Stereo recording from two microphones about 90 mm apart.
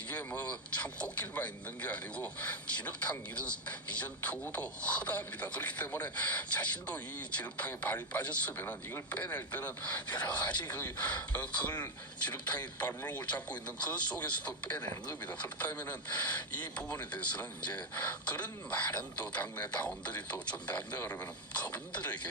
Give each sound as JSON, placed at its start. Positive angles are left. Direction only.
{"t": 0.1, "sound": "speech", "side_deg": 20}